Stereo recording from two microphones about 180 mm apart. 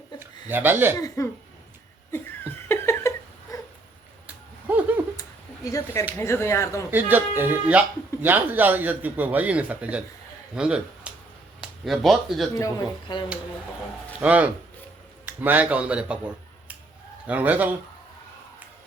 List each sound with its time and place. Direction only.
0.2 s speech: 10° right (ahead or behind)
0.9 s speech: 15° left (ahead or behind)
2.6 s laughter: 15° left (ahead or behind)
3.5 s dog: 20° left (ahead or behind)
5.7 s speech: 15° left (ahead or behind)
6.9 s speech: 10° right (ahead or behind)
12.5 s speech: 20° left (ahead or behind)
14.2 s speech: 10° right (ahead or behind)